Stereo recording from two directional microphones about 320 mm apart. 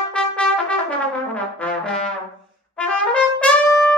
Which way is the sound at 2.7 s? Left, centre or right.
Centre.